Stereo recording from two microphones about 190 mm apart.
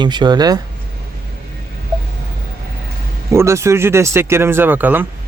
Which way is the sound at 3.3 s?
15° right (ahead or behind).